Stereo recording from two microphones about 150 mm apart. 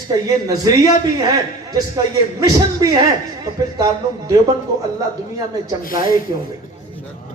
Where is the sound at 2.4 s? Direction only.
25° right (ahead or behind).